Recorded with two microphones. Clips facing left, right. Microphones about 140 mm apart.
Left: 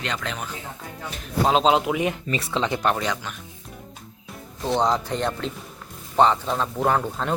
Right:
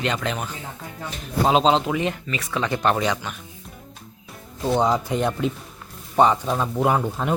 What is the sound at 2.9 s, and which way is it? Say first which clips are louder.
Speech: right 3 dB; 5° right (ahead or behind).